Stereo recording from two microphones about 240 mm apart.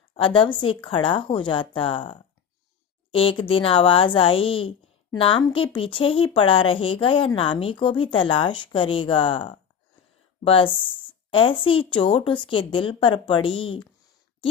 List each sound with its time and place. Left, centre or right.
0.1 s a woman's voice: left